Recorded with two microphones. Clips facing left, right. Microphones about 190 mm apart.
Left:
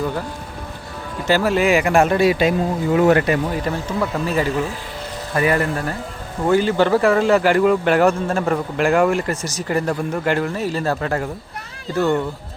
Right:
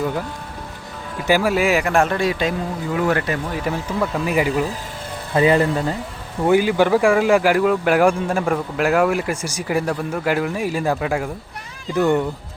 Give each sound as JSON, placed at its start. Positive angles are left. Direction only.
{"t": 1.3, "sound": "speech", "side_deg": -10}
{"t": 3.1, "sound": "speech", "side_deg": 20}
{"t": 3.5, "sound": "speech", "side_deg": -5}